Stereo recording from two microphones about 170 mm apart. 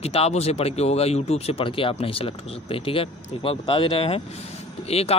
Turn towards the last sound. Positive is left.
turn(degrees=35)  # may be behind; listen again after turning